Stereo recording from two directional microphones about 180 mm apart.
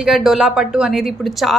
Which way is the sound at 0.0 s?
Centre (ahead or behind).